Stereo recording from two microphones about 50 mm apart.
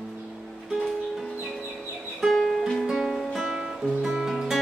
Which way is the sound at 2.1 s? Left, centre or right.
Centre.